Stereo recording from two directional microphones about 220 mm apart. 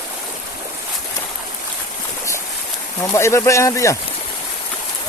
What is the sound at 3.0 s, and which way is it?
Speech, 10° left (ahead or behind).